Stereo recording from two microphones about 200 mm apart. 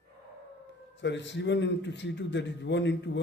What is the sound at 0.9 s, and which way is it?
A man's voice, 60° left (ahead or behind).